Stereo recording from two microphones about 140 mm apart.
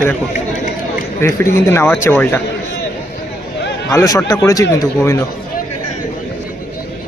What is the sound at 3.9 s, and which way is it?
Speech, 20° left (ahead or behind).